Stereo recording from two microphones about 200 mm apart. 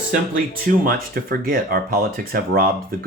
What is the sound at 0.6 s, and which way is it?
Speech, 45° right (ahead or behind).